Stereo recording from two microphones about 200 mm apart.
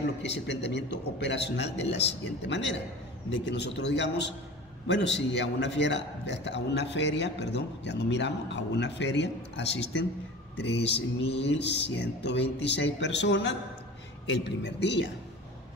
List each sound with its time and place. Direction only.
0.2 s a man's voice: 60° left (ahead or behind)